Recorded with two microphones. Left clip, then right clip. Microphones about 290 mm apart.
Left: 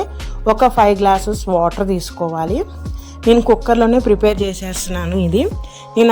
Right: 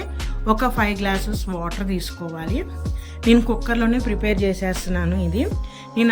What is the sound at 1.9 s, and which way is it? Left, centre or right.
Speech, centre.